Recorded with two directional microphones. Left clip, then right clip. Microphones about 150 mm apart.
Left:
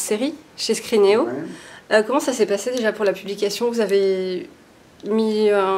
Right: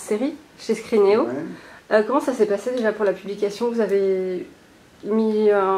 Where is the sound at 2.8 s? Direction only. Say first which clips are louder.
Even; 25° left (ahead or behind).